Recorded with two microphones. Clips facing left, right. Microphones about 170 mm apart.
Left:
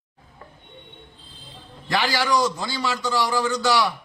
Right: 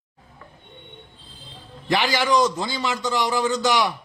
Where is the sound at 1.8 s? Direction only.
20° right (ahead or behind).